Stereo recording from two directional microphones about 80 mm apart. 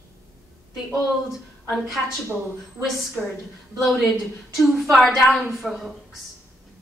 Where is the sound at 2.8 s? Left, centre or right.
Centre.